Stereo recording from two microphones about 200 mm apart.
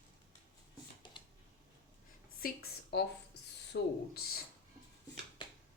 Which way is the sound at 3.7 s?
55° left (ahead or behind).